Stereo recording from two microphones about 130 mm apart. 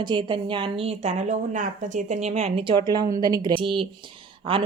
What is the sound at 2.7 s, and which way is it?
A woman's voice, 35° right (ahead or behind).